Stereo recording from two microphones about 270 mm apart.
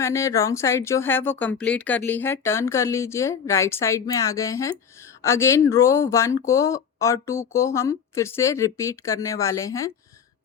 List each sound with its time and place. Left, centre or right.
0.0 s speech: centre